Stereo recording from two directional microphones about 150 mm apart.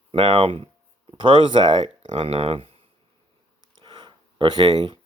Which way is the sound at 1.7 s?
50° right (ahead or behind).